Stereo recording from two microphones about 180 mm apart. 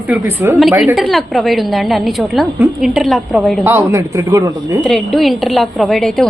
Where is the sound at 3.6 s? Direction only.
15° right (ahead or behind).